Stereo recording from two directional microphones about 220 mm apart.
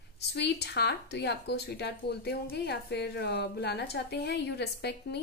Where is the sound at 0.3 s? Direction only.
50° left (ahead or behind).